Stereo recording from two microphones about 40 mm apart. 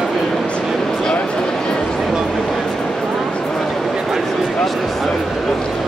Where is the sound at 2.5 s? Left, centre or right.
Centre.